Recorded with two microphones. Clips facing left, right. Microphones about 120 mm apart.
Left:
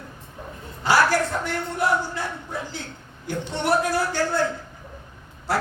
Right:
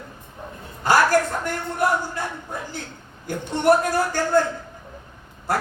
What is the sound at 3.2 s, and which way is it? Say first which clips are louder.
Speech: right 5 dB; 45° right (ahead or behind).